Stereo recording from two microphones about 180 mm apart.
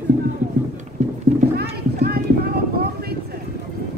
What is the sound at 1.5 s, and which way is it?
Clip-clop, 60° right (ahead or behind).